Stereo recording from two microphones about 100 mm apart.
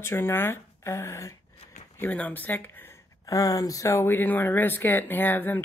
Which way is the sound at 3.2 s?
35° left (ahead or behind).